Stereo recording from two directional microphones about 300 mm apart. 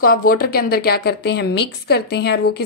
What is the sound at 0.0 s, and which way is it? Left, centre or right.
A woman's voice, left.